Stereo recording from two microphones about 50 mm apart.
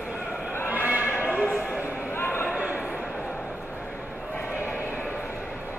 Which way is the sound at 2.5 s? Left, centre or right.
Right.